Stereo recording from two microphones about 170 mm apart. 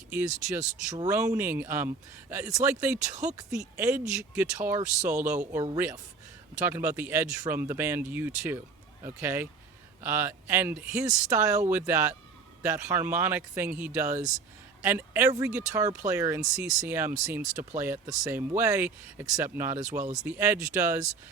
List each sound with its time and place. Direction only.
0.1 s speech: 10° right (ahead or behind)
3.8 s speech: 15° right (ahead or behind)
20.0 s speech: 45° right (ahead or behind)
20.2 s speech: 10° right (ahead or behind)